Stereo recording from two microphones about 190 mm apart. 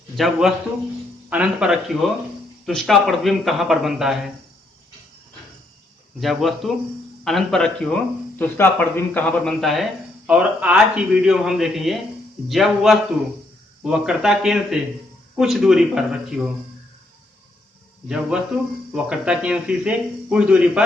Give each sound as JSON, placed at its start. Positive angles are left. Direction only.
{"t": 0.2, "sound": "a man's voice", "side_deg": 0}
{"t": 6.1, "sound": "a man's voice", "side_deg": 0}
{"t": 18.1, "sound": "a man's voice", "side_deg": -5}